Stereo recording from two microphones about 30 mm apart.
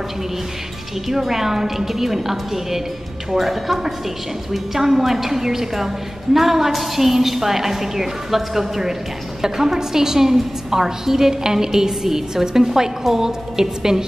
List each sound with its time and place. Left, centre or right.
1.0 s a woman's voice: centre